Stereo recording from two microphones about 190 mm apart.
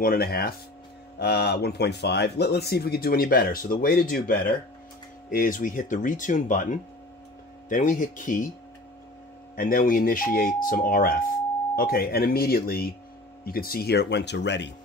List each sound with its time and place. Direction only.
0.0 s speech: 50° left (ahead or behind)
9.6 s speech: 50° left (ahead or behind); by 14.7 s 65° left (ahead or behind)